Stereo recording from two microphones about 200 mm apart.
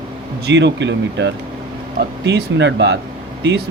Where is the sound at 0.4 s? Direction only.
60° right (ahead or behind).